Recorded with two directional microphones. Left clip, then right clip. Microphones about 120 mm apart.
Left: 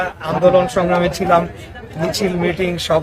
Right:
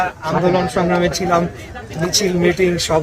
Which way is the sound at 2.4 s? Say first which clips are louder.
Right 3 dB; 35° left (ahead or behind).